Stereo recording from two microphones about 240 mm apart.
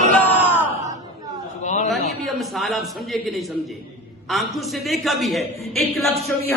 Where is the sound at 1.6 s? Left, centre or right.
Left.